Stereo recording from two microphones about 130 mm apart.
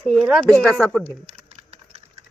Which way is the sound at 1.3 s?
50° right (ahead or behind).